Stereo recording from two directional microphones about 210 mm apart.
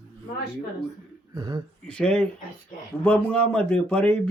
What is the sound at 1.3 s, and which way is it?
Speech, 20° right (ahead or behind).